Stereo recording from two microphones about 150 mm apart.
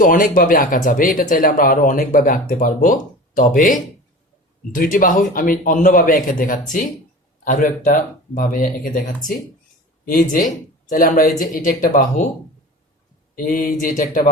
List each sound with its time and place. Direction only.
0.0 s speech: 65° left (ahead or behind)
13.3 s speech: 65° left (ahead or behind)